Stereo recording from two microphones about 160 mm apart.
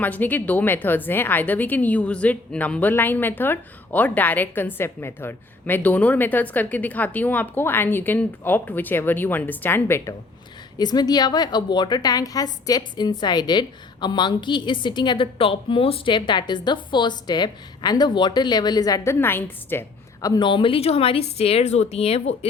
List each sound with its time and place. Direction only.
0.0 s a woman's voice: 10° left (ahead or behind)
10.8 s a woman's voice: 25° left (ahead or behind)
20.2 s a woman's voice: 25° left (ahead or behind)